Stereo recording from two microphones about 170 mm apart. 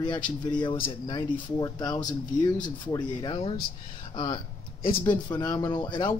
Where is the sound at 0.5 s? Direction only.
25° left (ahead or behind).